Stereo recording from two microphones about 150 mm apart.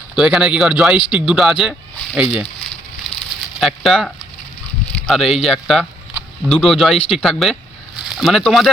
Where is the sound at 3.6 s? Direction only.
Centre (ahead or behind).